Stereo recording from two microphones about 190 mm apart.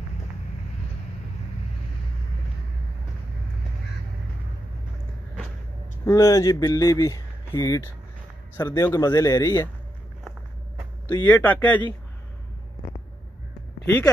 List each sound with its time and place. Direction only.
6.0 s speech: 15° left (ahead or behind)
11.2 s speech: 10° left (ahead or behind)